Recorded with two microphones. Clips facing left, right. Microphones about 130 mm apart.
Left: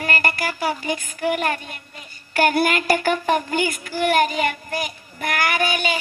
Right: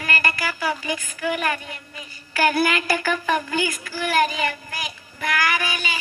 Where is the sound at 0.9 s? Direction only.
55° left (ahead or behind).